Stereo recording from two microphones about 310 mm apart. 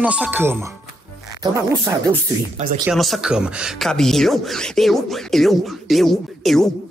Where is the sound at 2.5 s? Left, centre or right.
Right.